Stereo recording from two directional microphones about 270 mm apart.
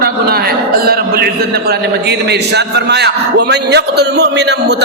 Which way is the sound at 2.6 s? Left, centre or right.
Right.